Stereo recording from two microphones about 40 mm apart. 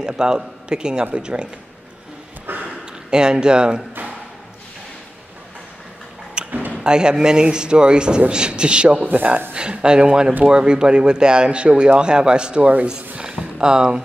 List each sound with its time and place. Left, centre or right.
0.0 s speech: centre
2.5 s a sound: right
3.1 s speech: right
6.4 s a sound: right
6.8 s speech: right
9.0 s speech: right
9.5 s speech: right